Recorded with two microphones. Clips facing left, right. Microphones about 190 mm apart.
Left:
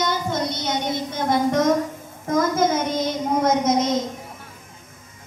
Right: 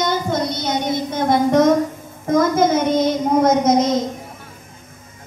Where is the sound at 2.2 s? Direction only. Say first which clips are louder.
Right 4 dB; 65° right (ahead or behind).